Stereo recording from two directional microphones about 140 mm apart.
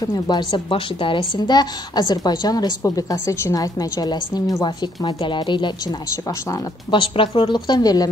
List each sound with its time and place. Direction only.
0.0 s a woman's voice: 30° left (ahead or behind)